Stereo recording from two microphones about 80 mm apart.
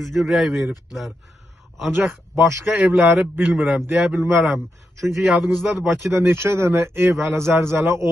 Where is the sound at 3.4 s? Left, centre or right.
Centre.